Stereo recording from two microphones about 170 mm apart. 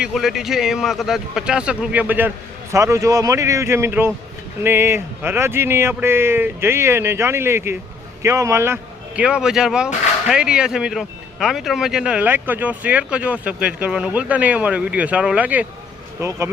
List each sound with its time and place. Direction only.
0.0 s a man's voice: centre (ahead or behind)